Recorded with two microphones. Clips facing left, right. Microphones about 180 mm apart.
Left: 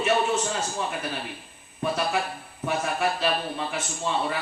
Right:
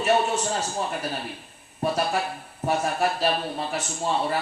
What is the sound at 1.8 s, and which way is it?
A man's voice, 40° right (ahead or behind).